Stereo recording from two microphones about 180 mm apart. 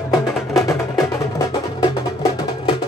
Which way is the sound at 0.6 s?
15° left (ahead or behind).